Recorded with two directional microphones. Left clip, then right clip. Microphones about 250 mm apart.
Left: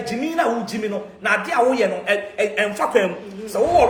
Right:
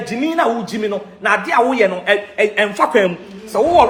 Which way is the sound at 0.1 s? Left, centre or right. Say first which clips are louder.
Right 4 dB; centre.